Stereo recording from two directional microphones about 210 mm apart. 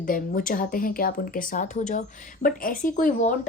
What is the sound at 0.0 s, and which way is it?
Speech, 40° left (ahead or behind).